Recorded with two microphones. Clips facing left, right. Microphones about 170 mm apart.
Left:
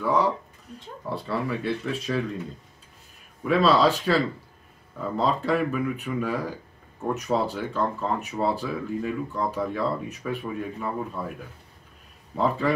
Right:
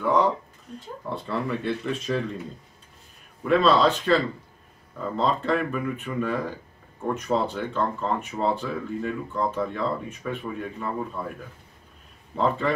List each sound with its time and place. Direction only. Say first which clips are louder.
0.7 s speech: even; centre (ahead or behind)
3.4 s speech: even; 5° left (ahead or behind)
12.4 s speech: even; 5° left (ahead or behind)